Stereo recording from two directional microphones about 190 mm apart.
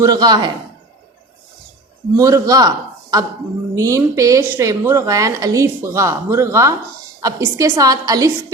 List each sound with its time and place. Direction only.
0.0 s a man's voice: 20° right (ahead or behind)
2.1 s a man's voice: 15° right (ahead or behind)